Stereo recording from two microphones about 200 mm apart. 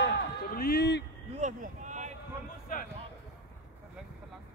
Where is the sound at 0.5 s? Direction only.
55° left (ahead or behind).